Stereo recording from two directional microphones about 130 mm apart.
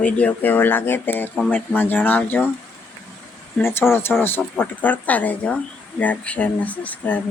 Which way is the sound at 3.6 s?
20° left (ahead or behind).